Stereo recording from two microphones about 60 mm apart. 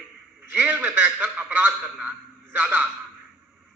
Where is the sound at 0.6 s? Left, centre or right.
Right.